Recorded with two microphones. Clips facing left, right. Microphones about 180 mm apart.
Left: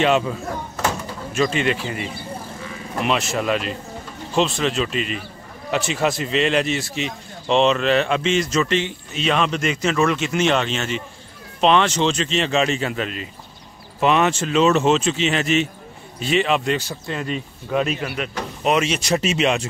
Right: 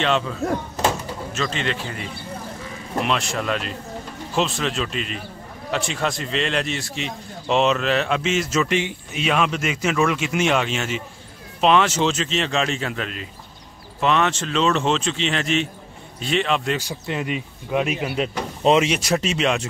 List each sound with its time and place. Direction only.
0.0 s a man's voice: 10° left (ahead or behind)
1.3 s a man's voice: 10° left (ahead or behind)
17.0 s speech: 15° right (ahead or behind)
18.1 s speech: 30° right (ahead or behind)
18.9 s speech: centre (ahead or behind)